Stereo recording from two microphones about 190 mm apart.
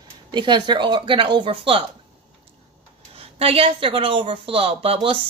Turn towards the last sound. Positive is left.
turn(degrees=-30)  # may be behind; listen again after turning